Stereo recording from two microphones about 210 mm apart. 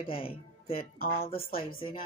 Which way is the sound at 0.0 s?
25° left (ahead or behind).